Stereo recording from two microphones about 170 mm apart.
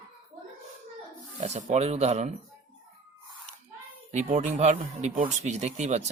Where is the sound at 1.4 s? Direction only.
40° right (ahead or behind).